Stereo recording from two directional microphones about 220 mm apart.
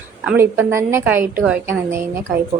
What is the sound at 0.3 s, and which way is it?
A woman's voice, 10° right (ahead or behind).